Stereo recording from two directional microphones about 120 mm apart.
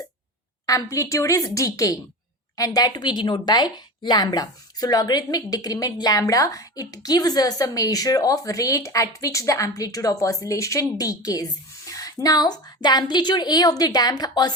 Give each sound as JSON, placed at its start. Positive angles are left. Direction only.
{"t": 0.6, "sound": "a woman's voice", "side_deg": 25}